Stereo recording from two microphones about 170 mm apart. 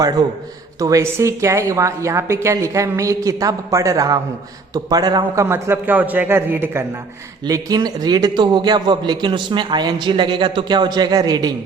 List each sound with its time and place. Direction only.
0.8 s a woman's voice: 20° right (ahead or behind)